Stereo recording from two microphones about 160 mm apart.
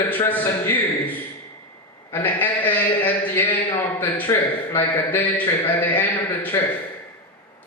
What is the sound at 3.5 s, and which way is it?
Speech, 25° left (ahead or behind).